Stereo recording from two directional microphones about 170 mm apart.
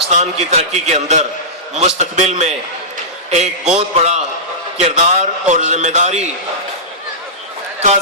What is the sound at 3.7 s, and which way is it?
A man's voice, 40° right (ahead or behind).